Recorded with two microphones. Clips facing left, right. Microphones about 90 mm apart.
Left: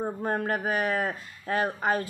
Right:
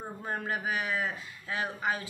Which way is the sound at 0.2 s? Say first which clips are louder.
Left 3 dB; 45° left (ahead or behind).